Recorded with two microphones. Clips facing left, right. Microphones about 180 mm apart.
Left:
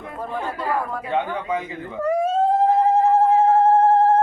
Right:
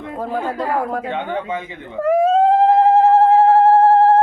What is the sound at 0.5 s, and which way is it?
Speech, 85° right.